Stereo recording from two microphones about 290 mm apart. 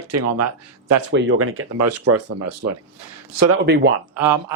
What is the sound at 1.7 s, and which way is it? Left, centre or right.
Speech, right.